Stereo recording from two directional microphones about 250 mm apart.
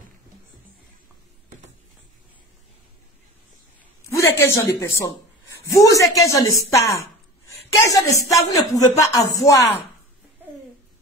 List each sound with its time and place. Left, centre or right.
4.1 s a woman's voice: centre
6.8 s speech: left
7.4 s speech: centre